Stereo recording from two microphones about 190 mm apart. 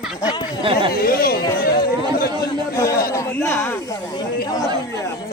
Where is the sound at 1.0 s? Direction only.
50° left (ahead or behind).